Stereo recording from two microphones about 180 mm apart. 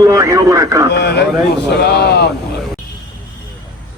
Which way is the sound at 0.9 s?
70° left (ahead or behind).